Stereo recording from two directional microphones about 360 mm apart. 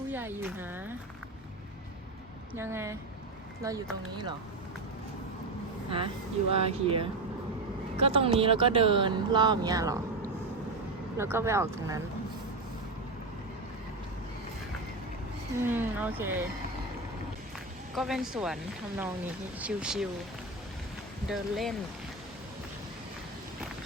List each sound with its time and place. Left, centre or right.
0.1 s speech: centre
2.6 s speech: centre
6.5 s speech: centre
15.6 s speech: centre
17.9 s speech: centre
21.2 s speech: centre